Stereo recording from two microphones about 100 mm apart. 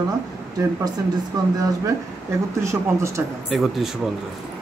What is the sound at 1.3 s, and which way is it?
Speech, 40° right (ahead or behind).